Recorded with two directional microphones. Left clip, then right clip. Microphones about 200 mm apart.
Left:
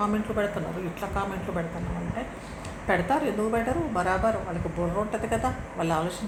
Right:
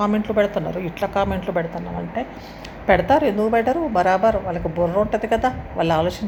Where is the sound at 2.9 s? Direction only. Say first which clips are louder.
Right 9 dB; 50° right (ahead or behind).